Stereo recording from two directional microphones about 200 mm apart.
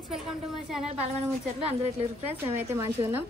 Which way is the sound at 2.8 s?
10° right (ahead or behind).